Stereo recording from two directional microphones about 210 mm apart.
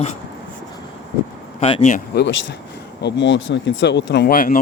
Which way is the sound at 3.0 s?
60° left (ahead or behind).